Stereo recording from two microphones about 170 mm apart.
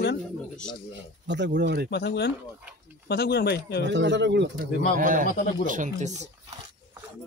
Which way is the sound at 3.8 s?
90° right.